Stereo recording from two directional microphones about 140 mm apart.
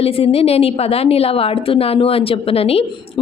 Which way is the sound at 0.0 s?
45° left (ahead or behind).